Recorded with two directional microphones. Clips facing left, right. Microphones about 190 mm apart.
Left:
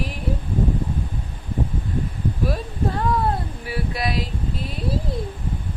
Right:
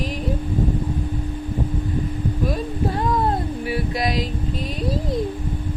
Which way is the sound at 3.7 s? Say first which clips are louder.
Right 1 dB; 20° right (ahead or behind).